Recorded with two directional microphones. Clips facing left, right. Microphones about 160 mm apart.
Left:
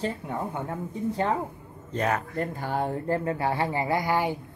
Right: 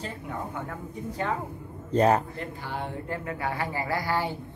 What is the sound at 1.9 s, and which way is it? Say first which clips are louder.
Speech: right 6 dB; 30° right (ahead or behind).